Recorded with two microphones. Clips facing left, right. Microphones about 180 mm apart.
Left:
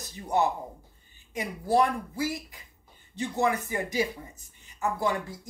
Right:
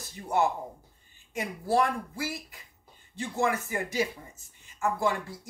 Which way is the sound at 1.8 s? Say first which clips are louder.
Left 3 dB; 20° left (ahead or behind).